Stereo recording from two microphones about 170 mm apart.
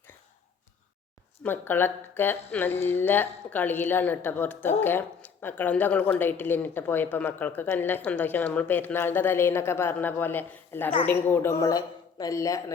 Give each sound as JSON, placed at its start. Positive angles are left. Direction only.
{"t": 1.5, "sound": "speech", "side_deg": 10}